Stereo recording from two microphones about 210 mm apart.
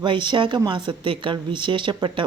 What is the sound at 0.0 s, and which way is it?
A woman's voice, 20° right (ahead or behind).